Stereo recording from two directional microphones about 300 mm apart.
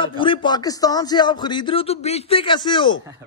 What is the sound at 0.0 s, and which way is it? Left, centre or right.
Speech, centre.